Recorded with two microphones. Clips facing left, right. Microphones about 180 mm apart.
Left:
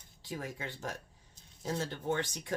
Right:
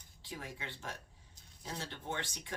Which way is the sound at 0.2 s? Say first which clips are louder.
Left 5 dB; 45° left (ahead or behind).